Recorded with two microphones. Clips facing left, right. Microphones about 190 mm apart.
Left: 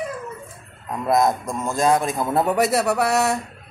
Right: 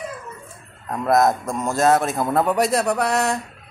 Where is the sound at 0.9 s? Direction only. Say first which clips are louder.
Right 1 dB; centre (ahead or behind).